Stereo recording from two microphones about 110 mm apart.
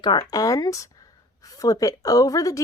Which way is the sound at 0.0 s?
40° left (ahead or behind).